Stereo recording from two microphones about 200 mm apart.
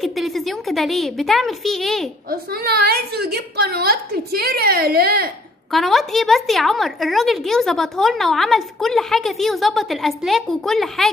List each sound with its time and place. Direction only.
0.0 s a woman's voice: centre (ahead or behind)
2.5 s a woman's voice: 50° right (ahead or behind)
5.7 s a woman's voice: centre (ahead or behind)